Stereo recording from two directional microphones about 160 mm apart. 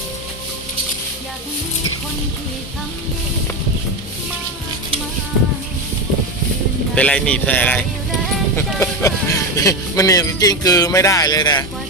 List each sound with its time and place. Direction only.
6.9 s speech: 5° left (ahead or behind); by 11.6 s 25° left (ahead or behind)